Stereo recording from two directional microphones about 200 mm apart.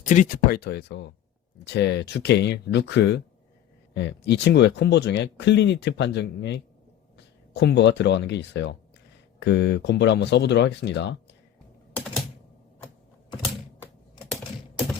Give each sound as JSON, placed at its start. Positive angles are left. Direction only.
{"t": 0.0, "sound": "speech", "side_deg": 40}
{"t": 11.9, "sound": "typing", "side_deg": 0}